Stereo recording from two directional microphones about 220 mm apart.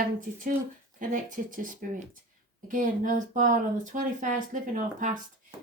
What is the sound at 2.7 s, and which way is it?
Speech, 35° right (ahead or behind).